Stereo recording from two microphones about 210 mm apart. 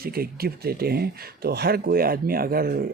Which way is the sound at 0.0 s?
45° right (ahead or behind).